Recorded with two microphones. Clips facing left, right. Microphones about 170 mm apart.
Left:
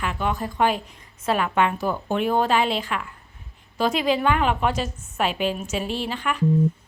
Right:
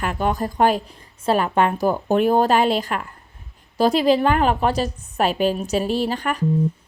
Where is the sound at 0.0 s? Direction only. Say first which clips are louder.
Right 4 dB; 45° right (ahead or behind).